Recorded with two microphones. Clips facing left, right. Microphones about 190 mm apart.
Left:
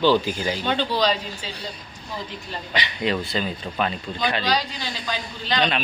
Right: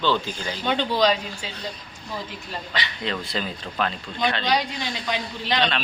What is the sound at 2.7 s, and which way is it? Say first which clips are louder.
Speech: left 5 dB; 15° left (ahead or behind).